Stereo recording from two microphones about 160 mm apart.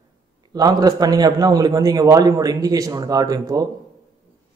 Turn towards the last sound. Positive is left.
turn(degrees=-25)  # may be behind; listen again after turning